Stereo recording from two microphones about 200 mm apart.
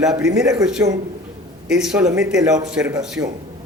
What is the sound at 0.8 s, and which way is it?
Speech, 15° right (ahead or behind).